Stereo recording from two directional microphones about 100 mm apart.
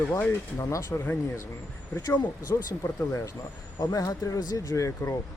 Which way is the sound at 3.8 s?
40° left (ahead or behind).